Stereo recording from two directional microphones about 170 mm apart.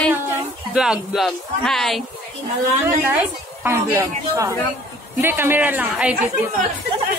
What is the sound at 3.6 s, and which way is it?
Speech, 15° right (ahead or behind).